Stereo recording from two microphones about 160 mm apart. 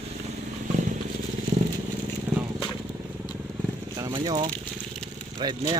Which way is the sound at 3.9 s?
25° right (ahead or behind).